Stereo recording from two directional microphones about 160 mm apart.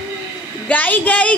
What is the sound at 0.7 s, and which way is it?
Speech, 10° left (ahead or behind).